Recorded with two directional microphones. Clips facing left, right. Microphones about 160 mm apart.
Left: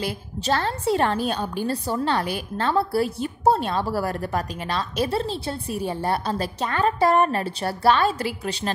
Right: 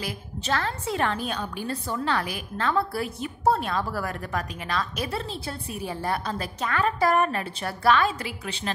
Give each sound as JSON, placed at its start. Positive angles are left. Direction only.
{"t": 0.0, "sound": "a woman's voice", "side_deg": 35}